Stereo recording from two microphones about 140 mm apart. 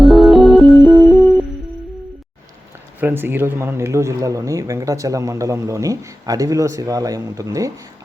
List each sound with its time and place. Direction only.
0.0 s music: centre (ahead or behind)
3.0 s speech: 15° right (ahead or behind)